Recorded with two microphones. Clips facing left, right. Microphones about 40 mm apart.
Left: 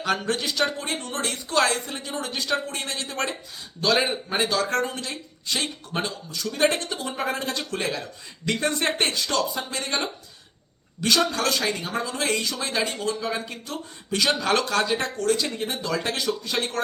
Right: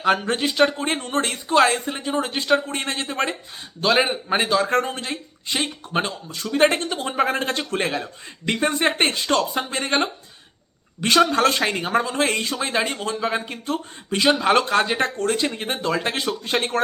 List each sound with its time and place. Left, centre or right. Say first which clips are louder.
0.0 s speech: right 5 dB; right
4.8 s speech: right 3 dB; right
8.5 s speech: right 5 dB; right
9.0 s speech: right 4 dB; right